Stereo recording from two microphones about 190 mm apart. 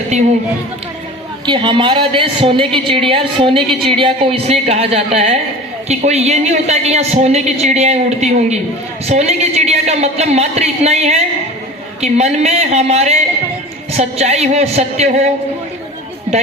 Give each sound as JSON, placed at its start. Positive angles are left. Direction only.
{"t": 0.1, "sound": "speech", "side_deg": -35}
{"t": 1.5, "sound": "a woman's voice", "side_deg": -25}